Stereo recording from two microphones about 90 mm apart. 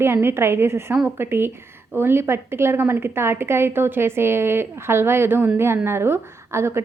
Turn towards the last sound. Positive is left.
turn(degrees=-30)  # may be behind; listen again after turning